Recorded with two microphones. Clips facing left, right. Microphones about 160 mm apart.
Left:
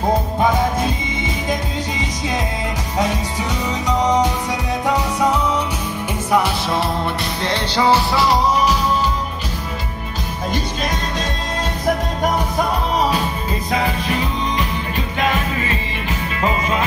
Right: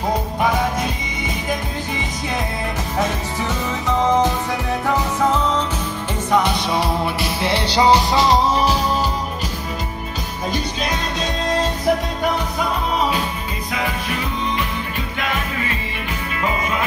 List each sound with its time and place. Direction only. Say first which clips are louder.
4.0 s music: right 1 dB; 15° left (ahead or behind)
6.3 s music: even; 5° left (ahead or behind)
7.4 s music: right 1 dB; 10° right (ahead or behind); by 8.7 s 30° right (ahead or behind)
13.7 s music: left 4 dB; 30° left (ahead or behind)
15.1 s music: left 5 dB; 25° left (ahead or behind)